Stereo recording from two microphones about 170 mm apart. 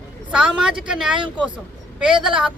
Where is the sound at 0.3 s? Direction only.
5° right (ahead or behind).